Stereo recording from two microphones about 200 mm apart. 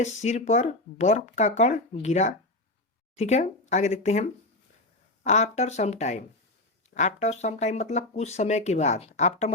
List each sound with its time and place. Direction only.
0.0 s speech: 35° left (ahead or behind)